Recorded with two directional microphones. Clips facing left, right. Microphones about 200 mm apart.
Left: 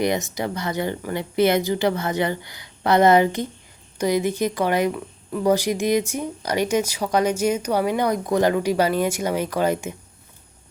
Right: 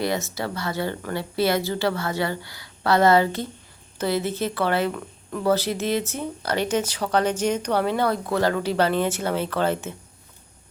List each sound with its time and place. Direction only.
0.0 s speech: 15° left (ahead or behind)